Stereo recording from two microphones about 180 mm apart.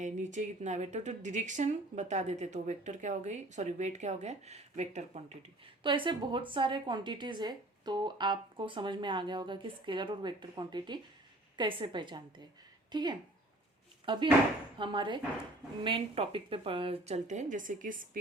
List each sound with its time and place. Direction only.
0.0 s speech: 40° right (ahead or behind)